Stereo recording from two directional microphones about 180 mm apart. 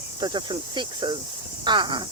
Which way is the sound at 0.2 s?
25° right (ahead or behind).